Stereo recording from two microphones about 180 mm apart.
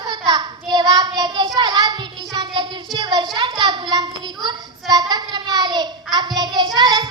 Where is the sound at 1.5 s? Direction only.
25° right (ahead or behind).